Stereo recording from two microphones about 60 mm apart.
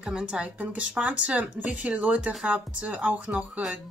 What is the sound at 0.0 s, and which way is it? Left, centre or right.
A woman's voice, centre.